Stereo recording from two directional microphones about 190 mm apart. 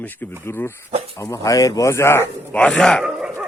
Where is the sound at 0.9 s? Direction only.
30° right (ahead or behind).